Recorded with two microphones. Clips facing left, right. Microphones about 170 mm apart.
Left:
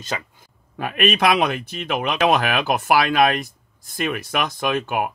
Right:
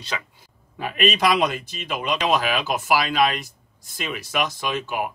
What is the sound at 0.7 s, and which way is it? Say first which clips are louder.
Speech: left 2 dB; 55° left (ahead or behind).